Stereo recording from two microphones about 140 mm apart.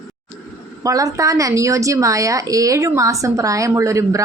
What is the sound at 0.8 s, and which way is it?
A woman's voice, 25° right (ahead or behind).